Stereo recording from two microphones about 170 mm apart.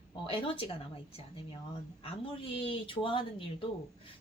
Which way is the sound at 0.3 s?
35° left (ahead or behind).